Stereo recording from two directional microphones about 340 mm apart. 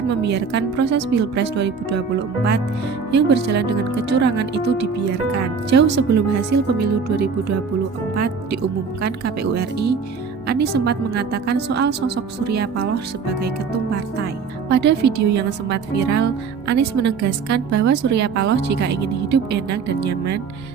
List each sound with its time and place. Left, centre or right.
0.1 s speech: right
6.1 s speech: right
9.0 s a woman's voice: right
14.7 s speech: right
15.3 s a woman's voice: right
15.7 s a woman's voice: right
20.1 s speech: right